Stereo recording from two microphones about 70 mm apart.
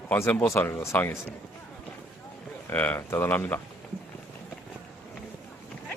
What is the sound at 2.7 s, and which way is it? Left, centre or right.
Speech, left.